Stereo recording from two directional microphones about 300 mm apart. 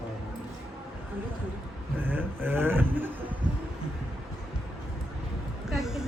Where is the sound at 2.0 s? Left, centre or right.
Centre.